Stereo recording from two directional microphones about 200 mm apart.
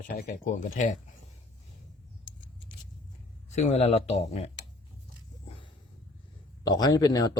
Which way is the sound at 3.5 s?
35° left (ahead or behind).